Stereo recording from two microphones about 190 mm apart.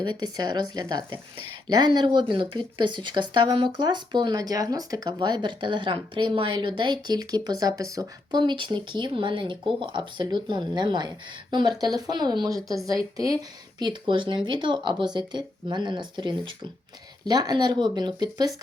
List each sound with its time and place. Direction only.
0.0 s speech: 25° right (ahead or behind)
13.7 s speech: 25° right (ahead or behind)